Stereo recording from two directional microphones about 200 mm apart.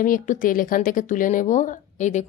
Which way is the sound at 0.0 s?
40° left (ahead or behind).